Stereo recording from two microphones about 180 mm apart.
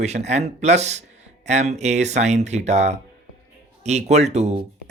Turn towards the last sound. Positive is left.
turn(degrees=-40)  # may be behind; listen again after turning